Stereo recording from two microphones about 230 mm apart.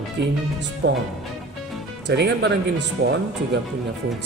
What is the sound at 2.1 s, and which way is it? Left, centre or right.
Speech, right.